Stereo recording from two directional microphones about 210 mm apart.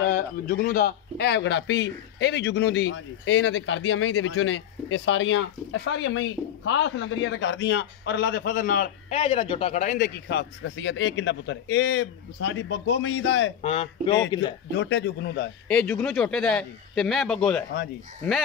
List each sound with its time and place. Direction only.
0.1 s a man's voice: 45° left (ahead or behind)
9.1 s a man's voice: 25° left (ahead or behind)
10.2 s a man's voice: 60° left (ahead or behind)
13.6 s a man's voice: 30° left (ahead or behind)
14.7 s a man's voice: 55° left (ahead or behind)
15.7 s speech: 5° left (ahead or behind)